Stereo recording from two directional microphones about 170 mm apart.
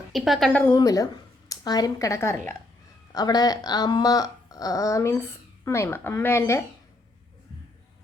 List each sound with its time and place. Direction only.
0.1 s a woman's voice: centre (ahead or behind)
0.6 s speech: 20° left (ahead or behind)